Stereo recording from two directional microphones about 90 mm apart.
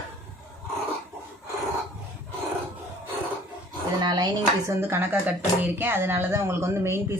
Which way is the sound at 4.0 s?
50° right (ahead or behind).